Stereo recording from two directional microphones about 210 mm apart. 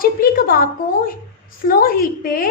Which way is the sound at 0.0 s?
45° left (ahead or behind).